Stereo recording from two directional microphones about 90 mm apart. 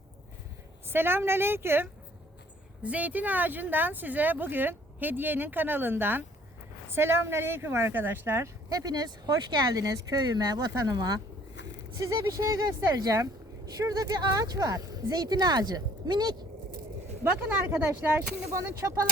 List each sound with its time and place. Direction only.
0.9 s speech: 25° right (ahead or behind)
8.7 s speech: 45° right (ahead or behind)
12.2 s speech: 45° right (ahead or behind)
17.7 s speech: 35° right (ahead or behind)